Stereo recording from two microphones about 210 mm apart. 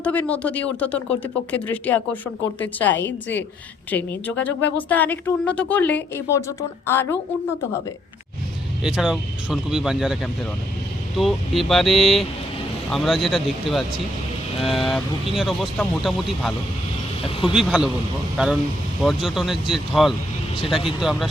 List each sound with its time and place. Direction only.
0.0 s a woman's voice: 5° left (ahead or behind)
2.9 s a woman's voice: 60° left (ahead or behind)
3.9 s a woman's voice: 10° left (ahead or behind)
8.8 s speech: 5° right (ahead or behind)
11.2 s speech: centre (ahead or behind)
19.0 s speech: centre (ahead or behind)